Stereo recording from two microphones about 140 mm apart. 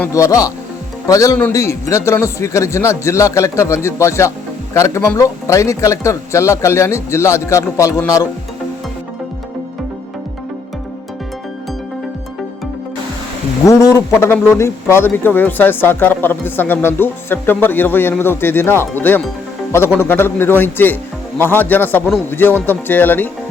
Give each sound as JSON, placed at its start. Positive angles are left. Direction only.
{"t": 0.1, "sound": "speech", "side_deg": 25}
{"t": 13.7, "sound": "speech", "side_deg": 20}